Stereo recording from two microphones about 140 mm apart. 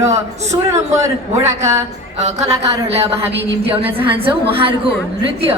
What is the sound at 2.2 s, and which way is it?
A woman's voice, 55° right (ahead or behind).